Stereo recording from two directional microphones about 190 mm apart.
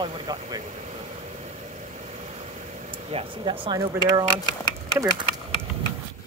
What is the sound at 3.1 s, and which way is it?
Speech, 25° right (ahead or behind).